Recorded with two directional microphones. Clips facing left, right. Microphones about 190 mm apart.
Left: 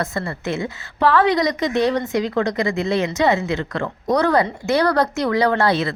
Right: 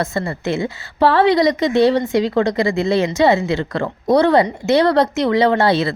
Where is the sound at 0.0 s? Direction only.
30° right (ahead or behind).